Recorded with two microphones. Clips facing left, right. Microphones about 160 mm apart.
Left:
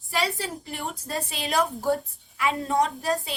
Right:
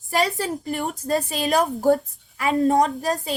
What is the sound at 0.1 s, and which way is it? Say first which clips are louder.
A woman's voice: right 5 dB; 45° right (ahead or behind).